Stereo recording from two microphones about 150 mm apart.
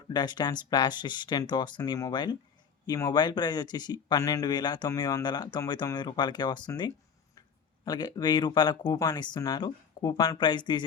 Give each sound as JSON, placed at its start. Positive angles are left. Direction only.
{"t": 0.1, "sound": "speech", "side_deg": 30}